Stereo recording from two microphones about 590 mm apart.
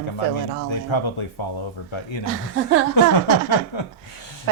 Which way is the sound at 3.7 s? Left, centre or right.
Left.